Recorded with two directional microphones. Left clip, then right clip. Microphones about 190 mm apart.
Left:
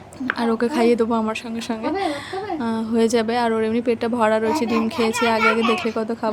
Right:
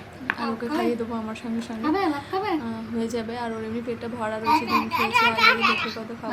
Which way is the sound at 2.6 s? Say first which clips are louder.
Left 10 dB; 55° left (ahead or behind).